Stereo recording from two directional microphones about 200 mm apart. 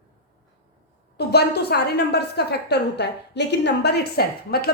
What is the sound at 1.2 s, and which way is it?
A woman's voice, 55° left (ahead or behind).